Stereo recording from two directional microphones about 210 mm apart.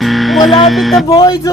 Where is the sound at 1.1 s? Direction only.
20° left (ahead or behind).